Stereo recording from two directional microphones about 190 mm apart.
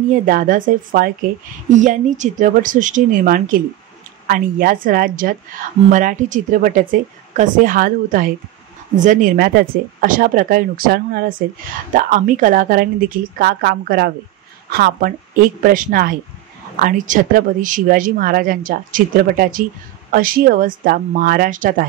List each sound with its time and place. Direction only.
0.1 s a woman's voice: 45° right (ahead or behind)